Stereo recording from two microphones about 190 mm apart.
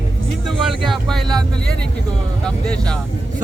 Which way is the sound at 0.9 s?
Centre (ahead or behind).